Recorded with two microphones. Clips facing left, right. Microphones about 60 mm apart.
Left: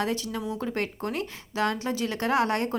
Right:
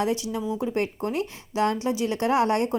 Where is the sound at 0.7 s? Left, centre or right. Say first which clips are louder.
Right 3 dB; left.